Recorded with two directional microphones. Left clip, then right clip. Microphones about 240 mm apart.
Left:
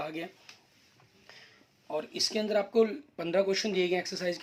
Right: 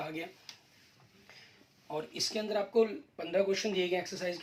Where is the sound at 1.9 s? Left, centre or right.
Left.